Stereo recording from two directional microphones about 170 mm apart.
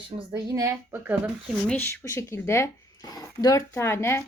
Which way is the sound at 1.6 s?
10° left (ahead or behind).